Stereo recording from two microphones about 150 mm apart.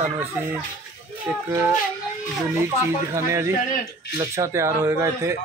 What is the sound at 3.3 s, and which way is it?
Speech, 20° right (ahead or behind).